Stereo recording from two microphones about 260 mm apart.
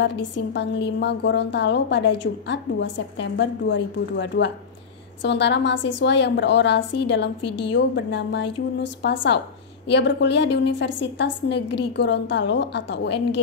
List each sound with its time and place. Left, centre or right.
0.0 s a woman's voice: left